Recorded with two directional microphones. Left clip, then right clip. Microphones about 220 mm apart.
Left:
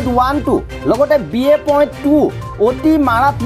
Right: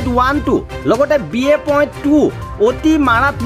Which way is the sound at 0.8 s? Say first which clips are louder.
Left 1 dB; 15° right (ahead or behind).